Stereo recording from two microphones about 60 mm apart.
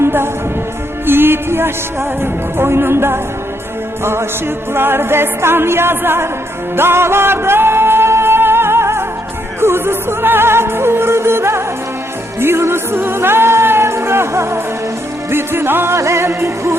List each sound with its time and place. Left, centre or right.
0.0 s music: right